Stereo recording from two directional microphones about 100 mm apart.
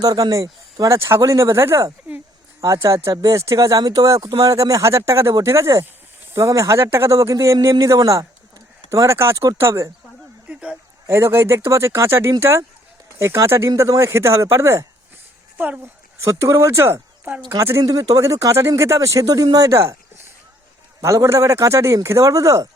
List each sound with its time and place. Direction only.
0.0 s speech: 40° right (ahead or behind)
10.5 s speech: 10° right (ahead or behind)
11.0 s speech: 25° right (ahead or behind)
15.5 s speech: 15° right (ahead or behind)
16.2 s speech: 30° right (ahead or behind)